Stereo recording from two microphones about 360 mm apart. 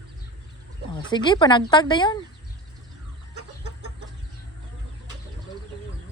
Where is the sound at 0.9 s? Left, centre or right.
Centre.